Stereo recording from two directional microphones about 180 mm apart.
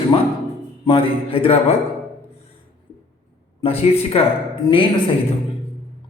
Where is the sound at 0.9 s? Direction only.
30° left (ahead or behind).